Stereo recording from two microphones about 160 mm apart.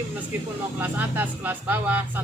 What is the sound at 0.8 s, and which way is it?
Speech, 10° right (ahead or behind).